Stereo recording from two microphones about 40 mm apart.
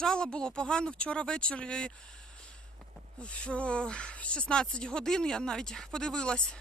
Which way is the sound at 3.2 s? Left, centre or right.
Left.